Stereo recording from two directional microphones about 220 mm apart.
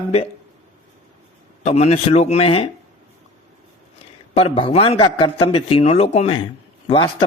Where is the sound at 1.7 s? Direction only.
30° left (ahead or behind).